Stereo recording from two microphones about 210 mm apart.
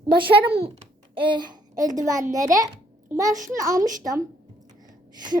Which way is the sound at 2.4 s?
40° right (ahead or behind).